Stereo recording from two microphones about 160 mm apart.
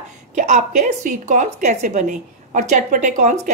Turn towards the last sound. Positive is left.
turn(degrees=-50)  # may be behind; listen again after turning